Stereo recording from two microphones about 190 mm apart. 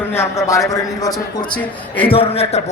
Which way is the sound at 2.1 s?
30° left (ahead or behind).